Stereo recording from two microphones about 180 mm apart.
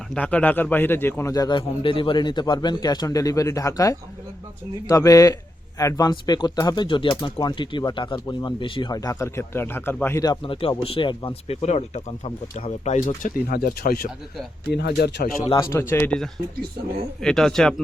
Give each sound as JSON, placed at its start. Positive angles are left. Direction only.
{"t": 0.1, "sound": "speech", "side_deg": 5}
{"t": 10.4, "sound": "speech", "side_deg": 30}
{"t": 14.7, "sound": "speech", "side_deg": 65}
{"t": 15.5, "sound": "speech", "side_deg": 15}